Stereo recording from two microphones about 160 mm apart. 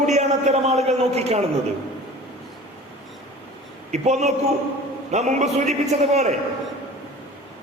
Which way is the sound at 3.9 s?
45° right (ahead or behind).